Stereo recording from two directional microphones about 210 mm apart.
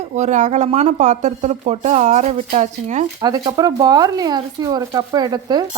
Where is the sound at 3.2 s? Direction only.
20° right (ahead or behind).